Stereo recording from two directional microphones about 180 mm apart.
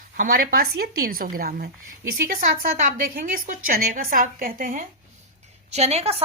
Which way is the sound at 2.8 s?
50° right (ahead or behind).